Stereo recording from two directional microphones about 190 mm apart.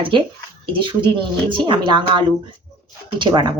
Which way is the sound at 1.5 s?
25° right (ahead or behind).